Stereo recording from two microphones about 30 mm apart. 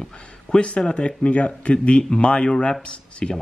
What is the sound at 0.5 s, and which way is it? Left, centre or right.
Speech, left.